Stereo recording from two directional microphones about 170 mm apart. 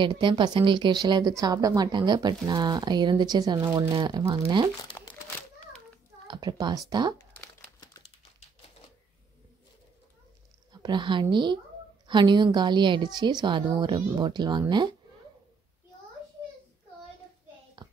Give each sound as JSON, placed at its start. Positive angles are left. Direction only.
{"t": 0.0, "sound": "speech", "side_deg": -30}
{"t": 5.0, "sound": "a sound", "side_deg": 15}
{"t": 6.2, "sound": "speech", "side_deg": -25}
{"t": 7.8, "sound": "crumpling", "side_deg": 25}
{"t": 10.7, "sound": "speech", "side_deg": -25}
{"t": 17.8, "sound": "hands", "side_deg": -25}